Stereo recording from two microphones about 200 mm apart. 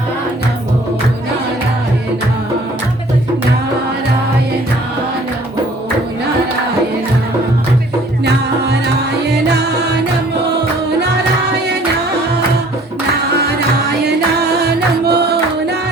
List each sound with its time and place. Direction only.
8.2 s music: 55° right (ahead or behind)
13.1 s music: 55° right (ahead or behind)